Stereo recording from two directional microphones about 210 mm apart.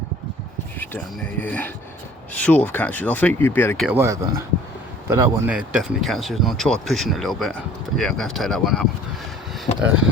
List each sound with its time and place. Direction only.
0.8 s speech: 5° left (ahead or behind)
3.8 s speech: 10° right (ahead or behind)
9.7 s a sound: 30° left (ahead or behind)